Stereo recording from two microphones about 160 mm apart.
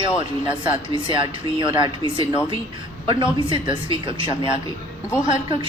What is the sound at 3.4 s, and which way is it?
Speech, 30° right (ahead or behind).